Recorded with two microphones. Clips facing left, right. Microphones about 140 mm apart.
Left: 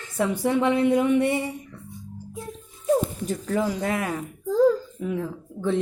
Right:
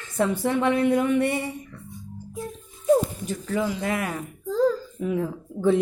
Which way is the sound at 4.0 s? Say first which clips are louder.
Left 1 dB; 15° left (ahead or behind).